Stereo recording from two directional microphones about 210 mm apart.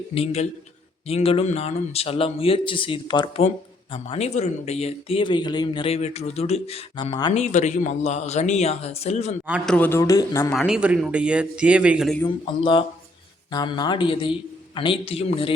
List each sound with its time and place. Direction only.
0.1 s speech: 25° left (ahead or behind)
7.3 s speech: 35° left (ahead or behind)
9.5 s a man's voice: 5° right (ahead or behind)
9.7 s speech: 10° left (ahead or behind)
10.5 s a man's voice: centre (ahead or behind)
12.5 s speech: 25° left (ahead or behind)